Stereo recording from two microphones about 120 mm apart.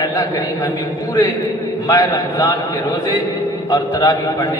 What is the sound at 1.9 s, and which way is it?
A man's voice, 30° left (ahead or behind).